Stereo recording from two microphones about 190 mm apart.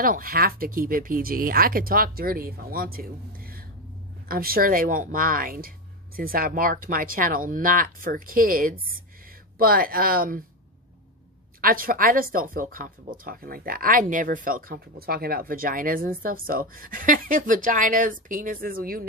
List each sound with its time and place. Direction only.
0.0 s speech: 50° right (ahead or behind)
11.6 s speech: 50° right (ahead or behind)